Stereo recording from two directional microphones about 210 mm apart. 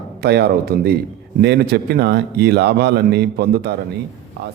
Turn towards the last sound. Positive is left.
turn(degrees=-50)  # may be behind; listen again after turning